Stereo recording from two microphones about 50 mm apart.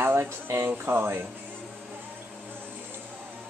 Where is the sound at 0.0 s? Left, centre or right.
Right.